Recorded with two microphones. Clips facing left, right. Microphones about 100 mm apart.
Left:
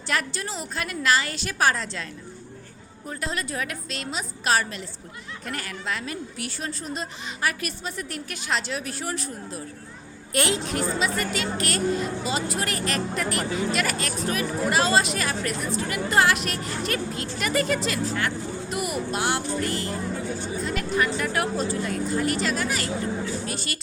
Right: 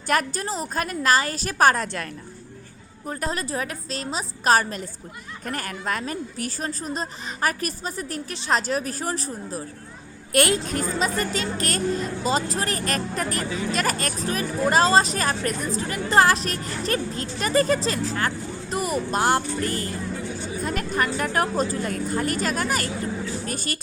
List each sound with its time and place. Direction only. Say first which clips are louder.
0.1 s speech: right 5 dB; 45° right (ahead or behind)
3.1 s speech: right 3 dB; 40° right (ahead or behind)
10.3 s speech: right 3 dB; 50° right (ahead or behind)